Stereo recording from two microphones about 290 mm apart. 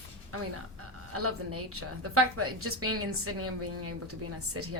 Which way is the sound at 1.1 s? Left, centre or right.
Right.